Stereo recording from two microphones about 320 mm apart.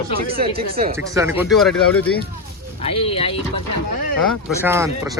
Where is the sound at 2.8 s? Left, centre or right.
Centre.